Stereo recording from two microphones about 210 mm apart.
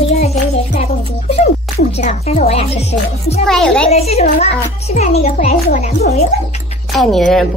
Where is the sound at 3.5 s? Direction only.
Centre (ahead or behind).